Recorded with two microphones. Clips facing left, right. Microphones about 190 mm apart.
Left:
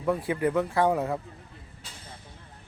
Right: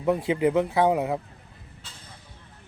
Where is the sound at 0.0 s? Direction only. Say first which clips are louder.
Right 3 dB; 20° right (ahead or behind).